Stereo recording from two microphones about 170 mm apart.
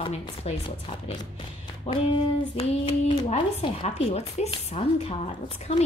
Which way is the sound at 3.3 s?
40° left (ahead or behind).